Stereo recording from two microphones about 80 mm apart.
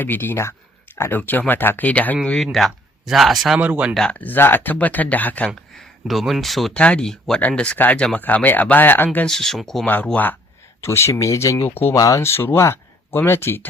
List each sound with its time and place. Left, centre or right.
0.0 s speech: left
1.2 s speech: left
2.2 s a man's voice: centre
3.6 s speech: centre
4.1 s speech: left
5.7 s speech: centre
6.7 s speech: centre
9.2 s a man's voice: centre
9.8 s speech: centre
10.8 s speech: left
11.5 s speech: left
11.9 s speech: left
12.2 s speech: left